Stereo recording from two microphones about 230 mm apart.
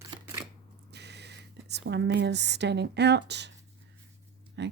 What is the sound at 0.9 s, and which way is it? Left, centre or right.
Speech, right.